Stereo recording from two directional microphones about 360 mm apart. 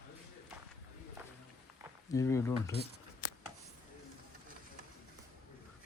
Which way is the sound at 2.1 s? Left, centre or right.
Centre.